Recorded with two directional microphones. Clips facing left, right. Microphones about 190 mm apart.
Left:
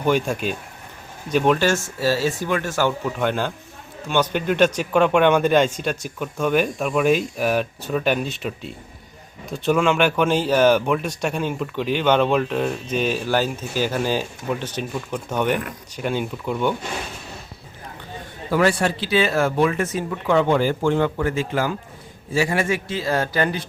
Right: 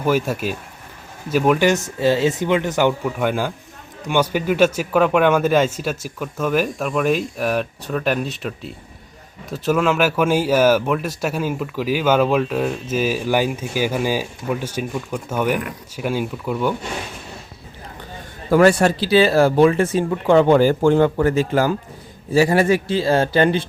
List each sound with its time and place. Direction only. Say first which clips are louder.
0.0 s speech: right 1 dB; 5° right (ahead or behind)
1.6 s speech: right 4 dB; 20° right (ahead or behind)
3.0 s a man's voice: right 2 dB; 10° right (ahead or behind)
18.5 s speech: right 6 dB; 45° right (ahead or behind); by 23.6 s 30° right (ahead or behind)